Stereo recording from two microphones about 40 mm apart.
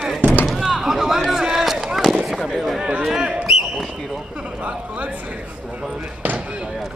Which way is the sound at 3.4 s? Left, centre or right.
Centre.